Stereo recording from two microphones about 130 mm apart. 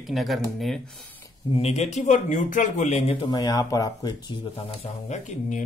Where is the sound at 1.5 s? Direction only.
55° left (ahead or behind).